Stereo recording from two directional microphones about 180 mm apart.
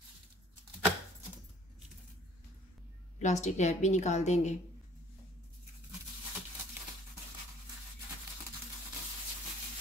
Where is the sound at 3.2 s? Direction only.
40° left (ahead or behind).